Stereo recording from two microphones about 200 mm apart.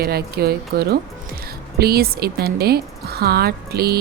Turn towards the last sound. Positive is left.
turn(degrees=-50)  # may be behind; listen again after turning